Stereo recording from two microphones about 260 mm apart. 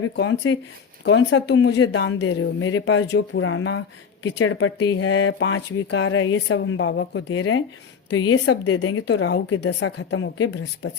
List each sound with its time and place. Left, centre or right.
0.2 s speech: left